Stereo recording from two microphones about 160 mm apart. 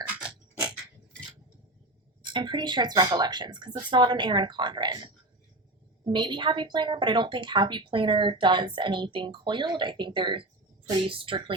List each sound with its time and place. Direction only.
0.1 s dog: 10° right (ahead or behind)
2.2 s speech: 30° right (ahead or behind)